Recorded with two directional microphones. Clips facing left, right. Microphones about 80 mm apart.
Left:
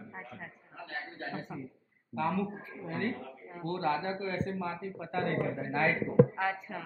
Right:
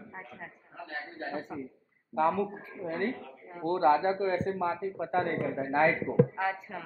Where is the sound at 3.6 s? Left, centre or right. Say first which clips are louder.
Right 7 dB; right.